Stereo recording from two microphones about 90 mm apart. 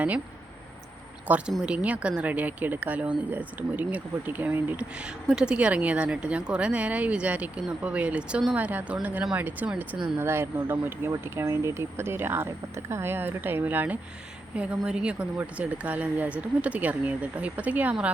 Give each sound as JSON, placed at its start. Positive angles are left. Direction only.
{"t": 1.3, "sound": "speech", "side_deg": -20}